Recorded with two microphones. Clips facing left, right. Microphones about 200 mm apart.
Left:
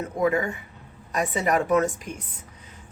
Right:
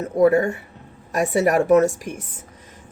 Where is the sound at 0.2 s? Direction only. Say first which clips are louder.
Right 8 dB; 40° right (ahead or behind).